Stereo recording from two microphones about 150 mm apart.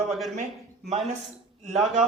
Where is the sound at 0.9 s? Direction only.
45° right (ahead or behind).